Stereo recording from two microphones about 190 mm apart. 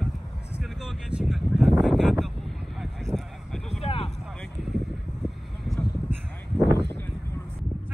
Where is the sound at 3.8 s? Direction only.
30° left (ahead or behind).